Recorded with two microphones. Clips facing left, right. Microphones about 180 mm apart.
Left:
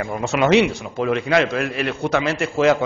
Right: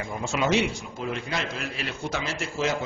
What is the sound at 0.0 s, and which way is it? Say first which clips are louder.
A man's voice: left 7 dB; 70° left (ahead or behind).